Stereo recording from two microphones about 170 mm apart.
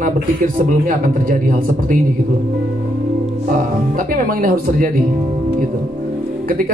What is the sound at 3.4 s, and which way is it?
Speech, 50° right (ahead or behind).